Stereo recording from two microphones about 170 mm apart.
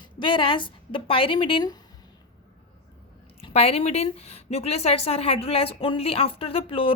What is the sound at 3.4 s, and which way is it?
A woman's voice, 35° left (ahead or behind).